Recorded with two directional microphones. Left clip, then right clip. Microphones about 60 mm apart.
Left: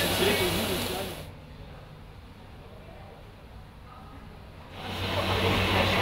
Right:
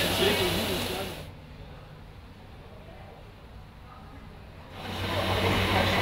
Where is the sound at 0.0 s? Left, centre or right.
Left.